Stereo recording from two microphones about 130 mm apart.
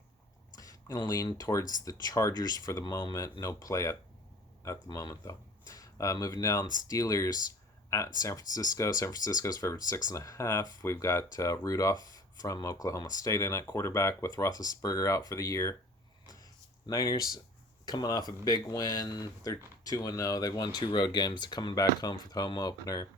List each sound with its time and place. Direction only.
0.6 s a sound: 30° left (ahead or behind)
1.3 s speech: 30° left (ahead or behind)
16.9 s speech: 25° left (ahead or behind)